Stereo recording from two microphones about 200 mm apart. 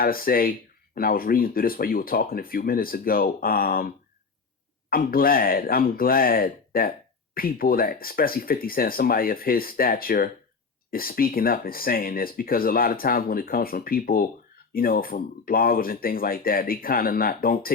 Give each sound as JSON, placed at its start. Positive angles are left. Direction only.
{"t": 0.0, "sound": "speech", "side_deg": 45}